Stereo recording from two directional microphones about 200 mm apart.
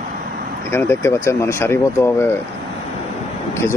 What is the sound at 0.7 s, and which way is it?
Speech, 10° left (ahead or behind).